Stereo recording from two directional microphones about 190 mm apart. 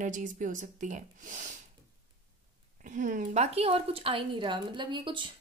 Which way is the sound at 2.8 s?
40° right (ahead or behind).